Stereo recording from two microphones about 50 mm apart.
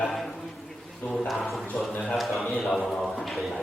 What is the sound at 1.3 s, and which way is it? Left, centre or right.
A man's voice, centre.